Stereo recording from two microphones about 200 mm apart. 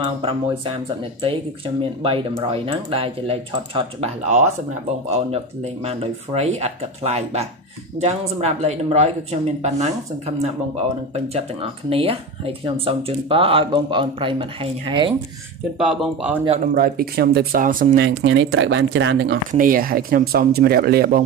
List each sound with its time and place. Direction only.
0.0 s speech: 25° right (ahead or behind)
5.1 s speech: 30° right (ahead or behind)
15.8 s speech: centre (ahead or behind)
16.6 s speech: 45° right (ahead or behind)
18.2 s speech: 65° right (ahead or behind)
19.5 s speech: 45° right (ahead or behind)